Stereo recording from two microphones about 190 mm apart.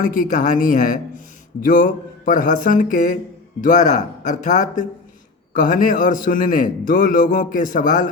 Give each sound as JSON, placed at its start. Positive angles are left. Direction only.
{"t": 0.0, "sound": "a man's voice", "side_deg": 45}